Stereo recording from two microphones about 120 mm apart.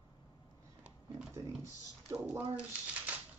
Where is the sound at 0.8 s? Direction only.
25° right (ahead or behind).